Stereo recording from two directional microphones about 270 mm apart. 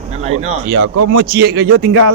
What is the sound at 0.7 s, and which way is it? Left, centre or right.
Speech, right.